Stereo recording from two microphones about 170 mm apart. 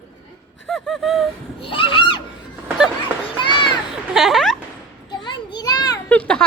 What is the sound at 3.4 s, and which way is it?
Children playing, 30° left (ahead or behind).